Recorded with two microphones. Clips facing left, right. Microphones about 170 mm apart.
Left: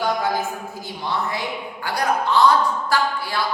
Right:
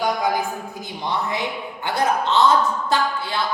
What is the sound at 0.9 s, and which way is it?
A woman's voice, 20° right (ahead or behind).